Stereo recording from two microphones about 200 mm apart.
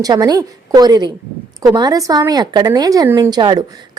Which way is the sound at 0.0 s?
20° right (ahead or behind).